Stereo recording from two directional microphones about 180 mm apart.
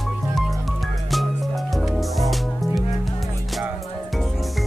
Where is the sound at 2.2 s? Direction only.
Centre (ahead or behind).